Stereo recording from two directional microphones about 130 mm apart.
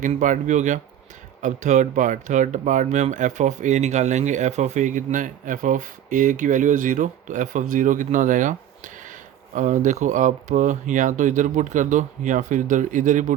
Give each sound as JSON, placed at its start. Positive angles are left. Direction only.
{"t": 0.0, "sound": "speech", "side_deg": -75}
{"t": 9.6, "sound": "speech", "side_deg": -75}